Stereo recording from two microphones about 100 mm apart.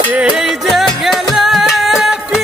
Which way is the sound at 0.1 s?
5° right (ahead or behind).